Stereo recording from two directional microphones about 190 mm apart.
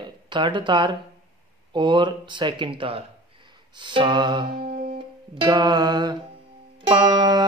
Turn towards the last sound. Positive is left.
turn(degrees=-20)  # may be behind; listen again after turning